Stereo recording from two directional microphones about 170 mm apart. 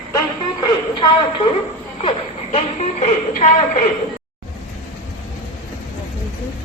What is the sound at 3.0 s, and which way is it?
Speech, 45° left (ahead or behind).